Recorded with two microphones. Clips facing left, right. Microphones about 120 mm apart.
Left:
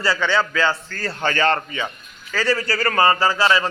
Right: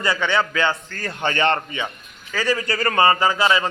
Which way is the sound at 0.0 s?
20° right (ahead or behind).